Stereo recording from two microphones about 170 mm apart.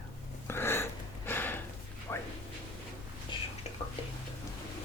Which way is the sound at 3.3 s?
30° left (ahead or behind).